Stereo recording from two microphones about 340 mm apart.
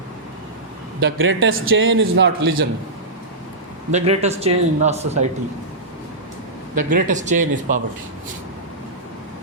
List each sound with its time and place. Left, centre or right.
1.0 s a man's voice: right
3.9 s a man's voice: centre
6.7 s a man's voice: right